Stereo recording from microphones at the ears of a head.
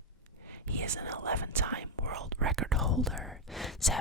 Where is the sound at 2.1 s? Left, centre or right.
Right.